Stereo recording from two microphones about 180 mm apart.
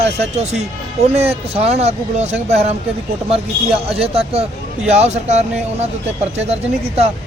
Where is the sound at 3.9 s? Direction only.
35° right (ahead or behind).